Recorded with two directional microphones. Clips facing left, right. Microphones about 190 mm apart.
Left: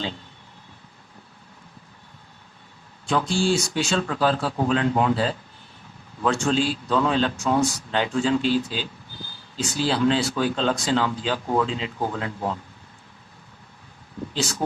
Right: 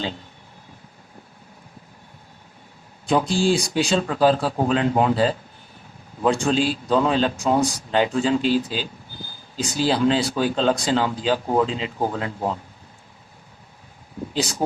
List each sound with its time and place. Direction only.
3.1 s speech: 15° right (ahead or behind)
14.3 s speech: 15° right (ahead or behind)